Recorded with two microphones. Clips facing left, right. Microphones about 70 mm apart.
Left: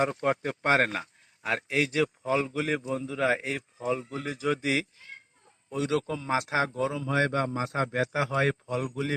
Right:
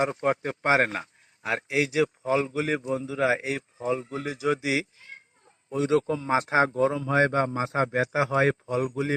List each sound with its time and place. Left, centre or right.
0.0 s a man's voice: centre
5.7 s a man's voice: right